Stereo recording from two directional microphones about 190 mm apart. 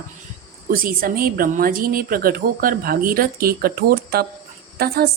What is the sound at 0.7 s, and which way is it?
A woman's voice, 50° right (ahead or behind).